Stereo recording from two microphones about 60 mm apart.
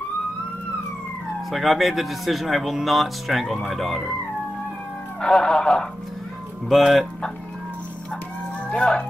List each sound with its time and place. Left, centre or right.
1.5 s speech: centre
5.2 s music: centre
6.7 s speech: centre
8.6 s speech: centre